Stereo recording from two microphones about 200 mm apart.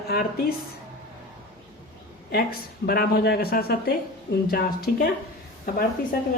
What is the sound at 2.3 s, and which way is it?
Speech, 50° left (ahead or behind).